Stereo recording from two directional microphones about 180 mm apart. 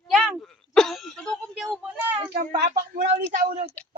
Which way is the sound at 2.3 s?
45° right (ahead or behind).